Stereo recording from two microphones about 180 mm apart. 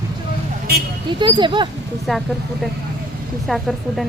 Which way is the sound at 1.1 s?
25° right (ahead or behind).